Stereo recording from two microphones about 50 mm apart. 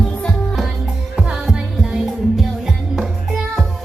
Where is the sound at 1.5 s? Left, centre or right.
Centre.